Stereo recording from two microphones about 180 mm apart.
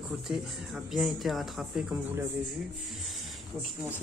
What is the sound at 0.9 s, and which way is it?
Speech, centre (ahead or behind).